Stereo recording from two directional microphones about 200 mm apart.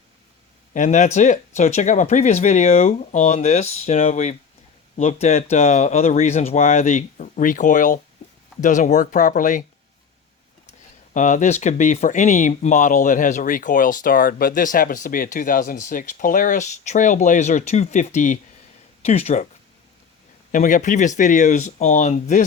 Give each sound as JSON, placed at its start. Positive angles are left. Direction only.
{"t": 0.7, "sound": "speech", "side_deg": 35}
{"t": 10.7, "sound": "speech", "side_deg": 35}
{"t": 20.5, "sound": "speech", "side_deg": 40}